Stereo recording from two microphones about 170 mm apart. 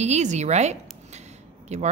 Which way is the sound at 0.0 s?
40° right (ahead or behind).